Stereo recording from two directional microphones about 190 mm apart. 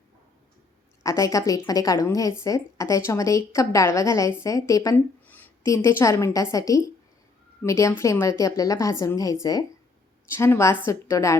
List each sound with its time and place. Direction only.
1.0 s a woman's voice: 15° left (ahead or behind)